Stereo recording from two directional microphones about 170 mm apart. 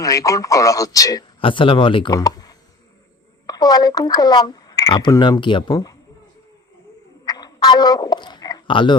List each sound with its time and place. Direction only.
0.0 s speech: 20° left (ahead or behind)
1.4 s speech: 30° left (ahead or behind)
7.3 s a sound: 25° left (ahead or behind)